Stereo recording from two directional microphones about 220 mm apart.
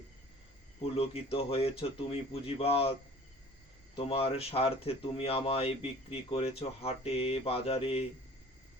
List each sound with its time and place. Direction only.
0.8 s speech: 25° left (ahead or behind)
3.9 s speech: 25° left (ahead or behind)